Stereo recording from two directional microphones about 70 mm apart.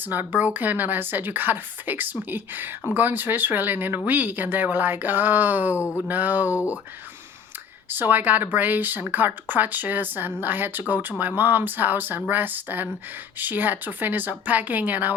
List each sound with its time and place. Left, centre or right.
0.0 s speech: right
7.9 s speech: right